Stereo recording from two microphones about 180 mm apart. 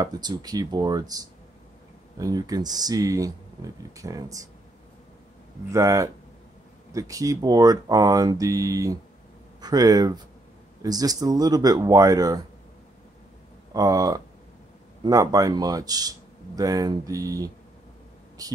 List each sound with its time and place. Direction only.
0.0 s a man's voice: 20° right (ahead or behind)
5.7 s a man's voice: 15° right (ahead or behind)
13.7 s a man's voice: 20° right (ahead or behind)